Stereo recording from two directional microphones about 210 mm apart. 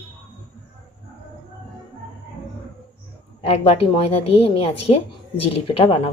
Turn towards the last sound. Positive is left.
turn(degrees=25)  # may be behind; listen again after turning